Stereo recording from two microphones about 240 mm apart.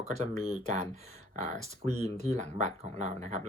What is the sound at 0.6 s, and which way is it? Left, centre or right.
Speech, right.